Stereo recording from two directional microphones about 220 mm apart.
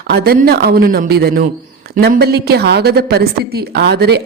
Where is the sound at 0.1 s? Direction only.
45° right (ahead or behind).